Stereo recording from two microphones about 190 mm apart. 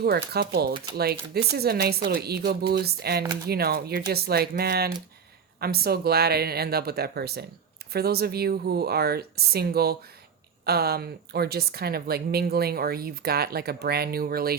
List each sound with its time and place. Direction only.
0.0 s a woman's voice: 55° right (ahead or behind)